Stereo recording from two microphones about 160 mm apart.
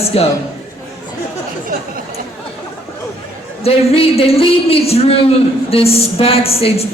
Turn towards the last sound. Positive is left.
turn(degrees=40)  # may be behind; listen again after turning